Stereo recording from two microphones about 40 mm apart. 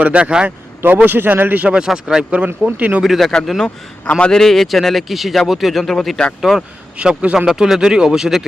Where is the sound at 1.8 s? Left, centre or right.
Centre.